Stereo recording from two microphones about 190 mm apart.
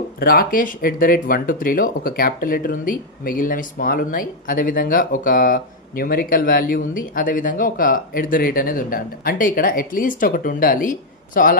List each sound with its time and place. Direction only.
0.2 s speech: 50° left (ahead or behind)